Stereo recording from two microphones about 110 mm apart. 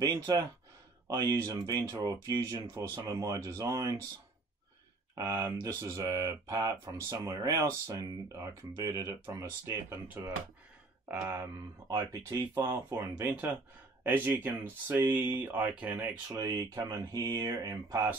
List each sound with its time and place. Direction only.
0.0 s speech: 35° right (ahead or behind)
5.2 s speech: 25° right (ahead or behind)
11.1 s speech: 20° right (ahead or behind)
12.1 s speech: 30° right (ahead or behind)
13.2 s speech: 20° right (ahead or behind)
16.3 s speech: 30° right (ahead or behind)